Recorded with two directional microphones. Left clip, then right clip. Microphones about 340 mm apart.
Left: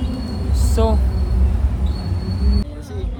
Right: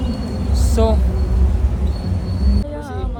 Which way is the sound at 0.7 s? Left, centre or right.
Centre.